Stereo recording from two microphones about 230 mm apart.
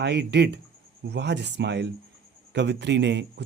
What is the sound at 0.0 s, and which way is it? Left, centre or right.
Speech, right.